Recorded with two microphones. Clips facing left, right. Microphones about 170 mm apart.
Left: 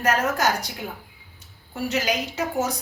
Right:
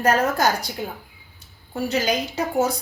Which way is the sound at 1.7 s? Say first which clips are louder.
Right 3 dB; 30° right (ahead or behind).